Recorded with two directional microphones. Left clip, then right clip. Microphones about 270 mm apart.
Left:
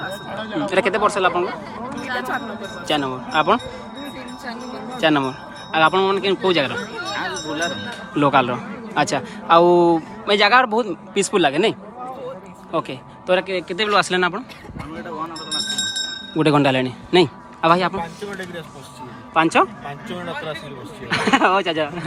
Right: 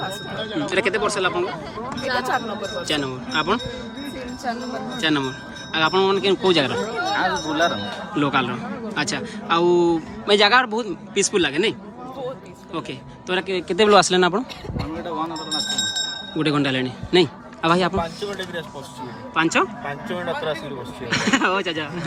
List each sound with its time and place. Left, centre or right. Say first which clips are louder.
0.3 s a sound: even; centre
0.5 s a man's voice: left 3 dB; centre
2.8 s a man's voice: left 7 dB; centre
4.9 s a man's voice: left 5 dB; centre
6.9 s a sound: right 4 dB; right
8.1 s a man's voice: left 5 dB; centre
13.5 s speech: right 3 dB; centre
14.8 s chink: right 2 dB; right
16.4 s a man's voice: left 5 dB; centre
19.3 s a man's voice: left 4 dB; centre
20.1 s speech: right 3 dB; centre
21.1 s a man's voice: left 4 dB; centre